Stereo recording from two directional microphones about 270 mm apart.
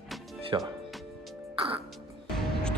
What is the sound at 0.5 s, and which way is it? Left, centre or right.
Speech, centre.